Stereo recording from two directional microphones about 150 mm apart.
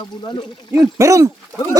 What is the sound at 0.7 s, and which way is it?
Speech, 20° right (ahead or behind).